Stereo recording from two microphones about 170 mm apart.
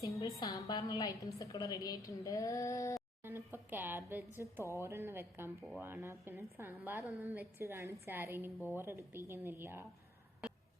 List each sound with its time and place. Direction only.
0.0 s a woman's voice: 20° left (ahead or behind)
3.2 s a woman's voice: 10° right (ahead or behind)